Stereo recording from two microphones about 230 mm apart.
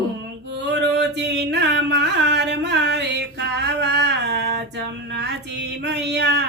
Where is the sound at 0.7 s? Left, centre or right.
Right.